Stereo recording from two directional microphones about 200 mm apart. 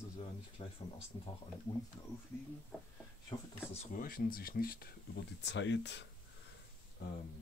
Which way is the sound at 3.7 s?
35° left (ahead or behind).